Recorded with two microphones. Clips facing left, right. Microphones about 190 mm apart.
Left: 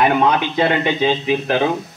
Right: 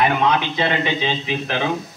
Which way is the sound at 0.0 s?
45° left (ahead or behind).